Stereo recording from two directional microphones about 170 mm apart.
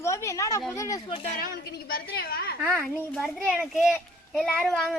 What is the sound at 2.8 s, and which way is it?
A child's voice, 5° left (ahead or behind).